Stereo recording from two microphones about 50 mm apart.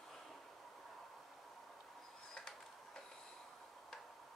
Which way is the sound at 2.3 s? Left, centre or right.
Centre.